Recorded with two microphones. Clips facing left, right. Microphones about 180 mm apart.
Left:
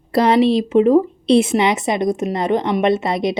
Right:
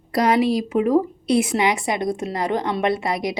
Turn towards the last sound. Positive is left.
turn(degrees=25)  # may be behind; listen again after turning